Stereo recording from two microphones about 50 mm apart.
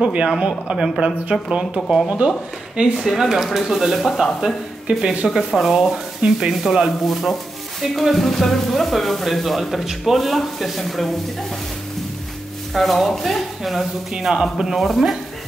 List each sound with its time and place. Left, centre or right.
0.0 s speech: right
3.0 s speech: centre
4.8 s speech: right
5.5 s speech: centre
7.1 s speech: centre
12.7 s speech: centre